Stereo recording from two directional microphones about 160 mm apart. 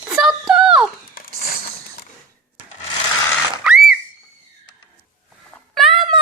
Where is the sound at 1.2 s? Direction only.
70° left (ahead or behind).